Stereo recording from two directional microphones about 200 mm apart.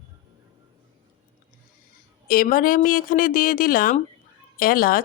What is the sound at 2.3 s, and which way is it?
Speech, 45° left (ahead or behind).